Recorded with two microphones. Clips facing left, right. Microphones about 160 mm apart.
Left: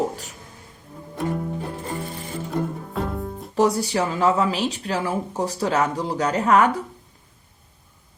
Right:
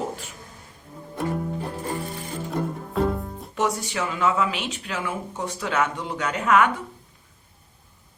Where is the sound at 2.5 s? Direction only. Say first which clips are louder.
Left 2 dB; centre (ahead or behind).